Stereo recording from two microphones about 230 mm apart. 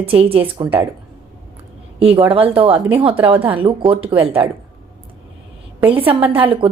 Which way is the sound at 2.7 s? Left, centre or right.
Centre.